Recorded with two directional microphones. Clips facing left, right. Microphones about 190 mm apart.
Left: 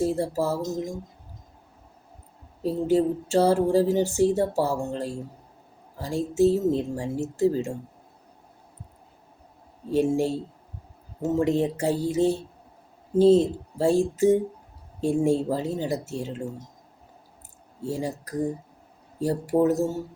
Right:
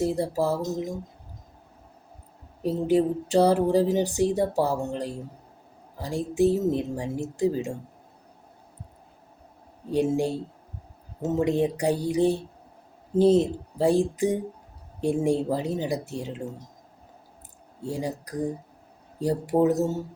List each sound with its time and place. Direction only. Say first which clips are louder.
0.0 s speech: even; 15° right (ahead or behind)
2.6 s speech: even; 15° right (ahead or behind)
9.9 s speech: left 1 dB; 15° right (ahead or behind)
17.8 s speech: left 1 dB; 15° right (ahead or behind)